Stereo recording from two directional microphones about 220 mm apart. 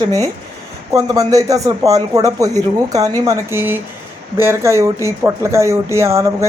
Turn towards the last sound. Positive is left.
turn(degrees=-15)  # may be behind; listen again after turning